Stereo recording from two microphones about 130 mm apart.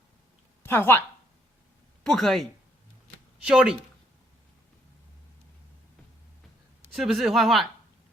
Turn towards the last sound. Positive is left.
turn(degrees=0)  # may be behind; listen again after turning